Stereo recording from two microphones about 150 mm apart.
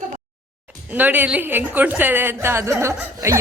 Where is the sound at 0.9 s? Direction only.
10° right (ahead or behind).